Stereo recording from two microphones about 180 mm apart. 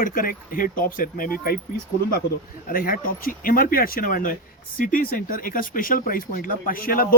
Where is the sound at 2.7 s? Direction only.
50° left (ahead or behind).